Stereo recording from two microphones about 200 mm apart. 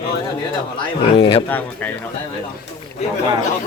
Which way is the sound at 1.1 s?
25° left (ahead or behind).